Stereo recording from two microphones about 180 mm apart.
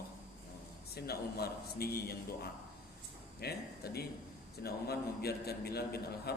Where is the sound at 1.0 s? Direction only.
60° left (ahead or behind).